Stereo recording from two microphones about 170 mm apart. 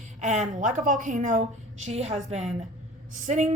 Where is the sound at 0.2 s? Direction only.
45° right (ahead or behind).